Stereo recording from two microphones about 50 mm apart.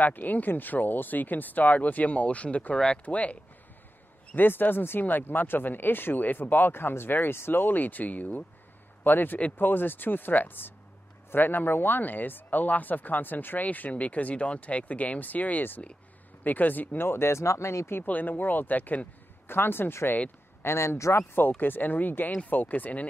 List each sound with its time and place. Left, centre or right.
0.0 s speech: left
4.4 s speech: left
18.0 s speech: left
19.5 s speech: left
21.4 s speech: left